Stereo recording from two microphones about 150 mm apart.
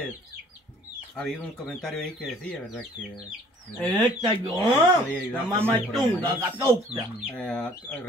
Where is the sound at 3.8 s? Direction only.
20° right (ahead or behind).